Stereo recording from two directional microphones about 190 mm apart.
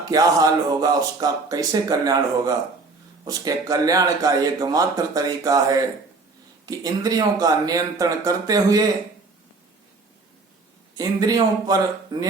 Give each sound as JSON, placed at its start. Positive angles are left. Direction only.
{"t": 0.0, "sound": "speech", "side_deg": -20}
{"t": 10.9, "sound": "speech", "side_deg": -20}